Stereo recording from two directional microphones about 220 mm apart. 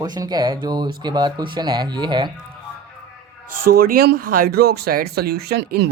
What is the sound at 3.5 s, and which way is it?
Speech, 90° right.